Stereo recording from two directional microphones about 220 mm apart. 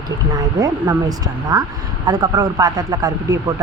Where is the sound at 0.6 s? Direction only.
15° right (ahead or behind).